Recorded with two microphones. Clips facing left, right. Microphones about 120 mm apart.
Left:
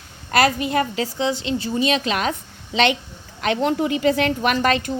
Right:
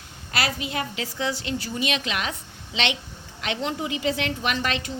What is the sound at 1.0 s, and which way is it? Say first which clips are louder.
A woman's voice: left 5 dB; 25° left (ahead or behind).